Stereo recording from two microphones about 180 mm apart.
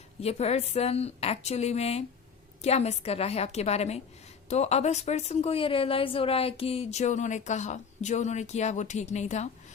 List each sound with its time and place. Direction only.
0.2 s a woman's voice: 35° left (ahead or behind)